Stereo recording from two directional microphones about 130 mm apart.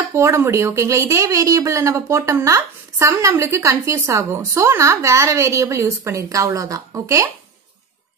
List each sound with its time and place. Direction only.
0.1 s speech: 20° right (ahead or behind)